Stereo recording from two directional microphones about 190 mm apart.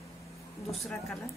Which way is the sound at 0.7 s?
Centre (ahead or behind).